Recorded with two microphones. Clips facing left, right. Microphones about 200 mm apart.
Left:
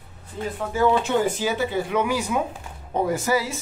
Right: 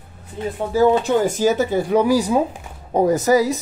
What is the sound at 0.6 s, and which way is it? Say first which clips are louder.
Speech: right 5 dB; 35° right (ahead or behind).